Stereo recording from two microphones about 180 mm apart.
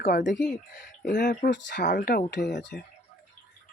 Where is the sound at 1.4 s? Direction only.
85° left.